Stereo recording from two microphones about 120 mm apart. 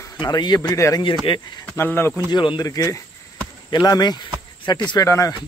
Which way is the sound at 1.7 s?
20° left (ahead or behind).